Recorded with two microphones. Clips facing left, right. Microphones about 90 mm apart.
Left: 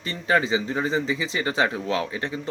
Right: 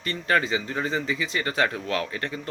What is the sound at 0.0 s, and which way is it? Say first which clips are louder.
Speech: left 1 dB; 20° left (ahead or behind).